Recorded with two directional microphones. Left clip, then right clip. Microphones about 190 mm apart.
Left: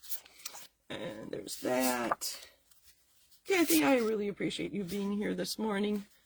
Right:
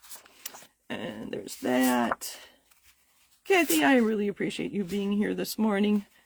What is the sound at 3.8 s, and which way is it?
Speech, 45° right (ahead or behind).